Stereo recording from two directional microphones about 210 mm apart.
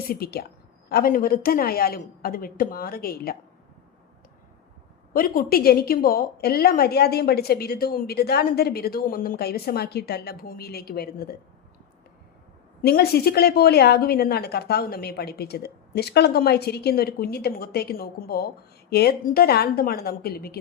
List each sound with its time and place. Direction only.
0.1 s a woman's voice: 45° left (ahead or behind)
5.1 s a woman's voice: 40° left (ahead or behind)
12.8 s a woman's voice: 50° left (ahead or behind)